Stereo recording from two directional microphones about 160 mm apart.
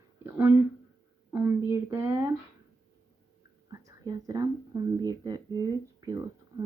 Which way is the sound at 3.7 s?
25° right (ahead or behind).